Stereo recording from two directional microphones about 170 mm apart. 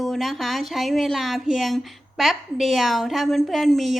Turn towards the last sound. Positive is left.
turn(degrees=0)  # may be behind; listen again after turning